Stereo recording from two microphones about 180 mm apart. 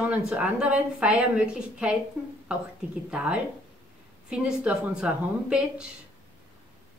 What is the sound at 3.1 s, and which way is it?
A woman's voice, 5° right (ahead or behind).